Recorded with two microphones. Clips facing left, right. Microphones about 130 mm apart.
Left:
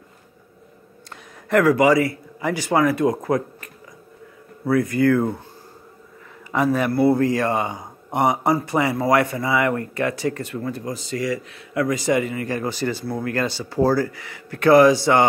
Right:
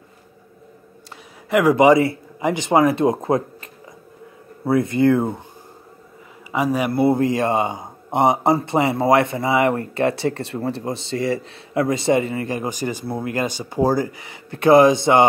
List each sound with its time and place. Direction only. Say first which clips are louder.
1.5 s speech: right 2 dB; 15° right (ahead or behind)
6.5 s speech: even; 10° right (ahead or behind)
6.9 s speech: even; 20° right (ahead or behind)
12.4 s speech: even; 15° right (ahead or behind)